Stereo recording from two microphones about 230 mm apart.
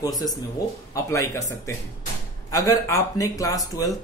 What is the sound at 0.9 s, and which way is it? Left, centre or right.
Speech, centre.